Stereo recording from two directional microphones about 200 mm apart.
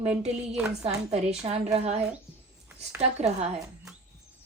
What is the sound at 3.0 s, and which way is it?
Speech, 35° right (ahead or behind).